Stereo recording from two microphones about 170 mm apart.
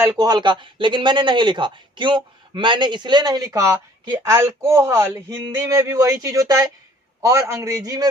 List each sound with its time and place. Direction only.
0.2 s speech: 25° right (ahead or behind)